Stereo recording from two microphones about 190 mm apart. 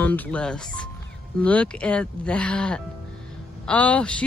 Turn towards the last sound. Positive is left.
turn(degrees=5)  # may be behind; listen again after turning